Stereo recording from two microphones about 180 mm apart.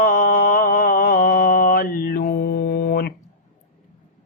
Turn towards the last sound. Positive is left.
turn(degrees=60)  # may be behind; listen again after turning